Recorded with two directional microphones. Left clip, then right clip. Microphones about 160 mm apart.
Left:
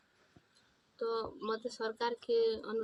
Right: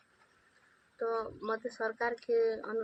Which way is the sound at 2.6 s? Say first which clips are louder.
Right 2 dB; 20° right (ahead or behind).